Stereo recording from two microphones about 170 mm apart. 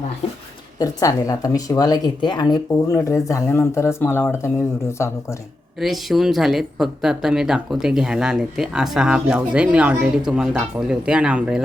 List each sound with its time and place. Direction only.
0.8 s speech: 20° left (ahead or behind)
5.8 s speech: centre (ahead or behind)